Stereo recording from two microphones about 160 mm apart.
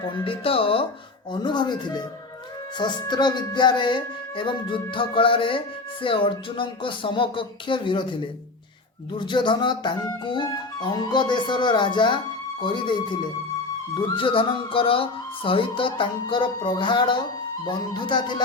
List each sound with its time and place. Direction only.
0.0 s speech: 30° left (ahead or behind)
9.1 s speech: 30° left (ahead or behind)